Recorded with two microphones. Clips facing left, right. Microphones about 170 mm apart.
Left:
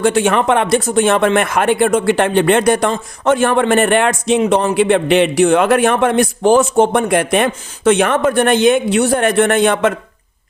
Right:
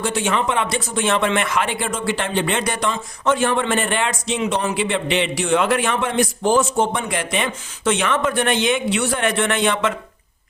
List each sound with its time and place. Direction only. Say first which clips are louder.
0.0 s speech: left 8 dB; 60° left (ahead or behind)